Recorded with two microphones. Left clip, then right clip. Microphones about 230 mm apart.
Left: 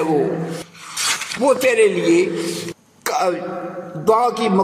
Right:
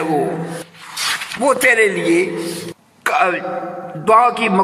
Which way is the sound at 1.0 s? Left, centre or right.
Left.